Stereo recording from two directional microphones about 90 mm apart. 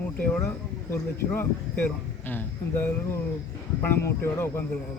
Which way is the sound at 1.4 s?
25° left (ahead or behind).